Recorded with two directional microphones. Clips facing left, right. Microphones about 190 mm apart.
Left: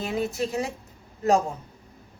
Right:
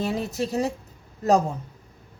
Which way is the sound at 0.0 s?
40° right (ahead or behind).